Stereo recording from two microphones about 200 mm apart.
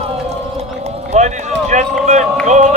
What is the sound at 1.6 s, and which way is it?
Speech, 35° right (ahead or behind).